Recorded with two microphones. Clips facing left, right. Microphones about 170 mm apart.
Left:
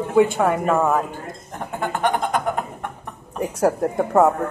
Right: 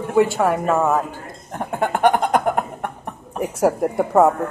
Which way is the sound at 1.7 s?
55° right (ahead or behind).